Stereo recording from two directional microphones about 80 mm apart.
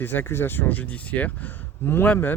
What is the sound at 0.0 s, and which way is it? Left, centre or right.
Speech, left.